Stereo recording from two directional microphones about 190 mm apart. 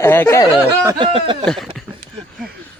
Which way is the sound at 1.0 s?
25° right (ahead or behind).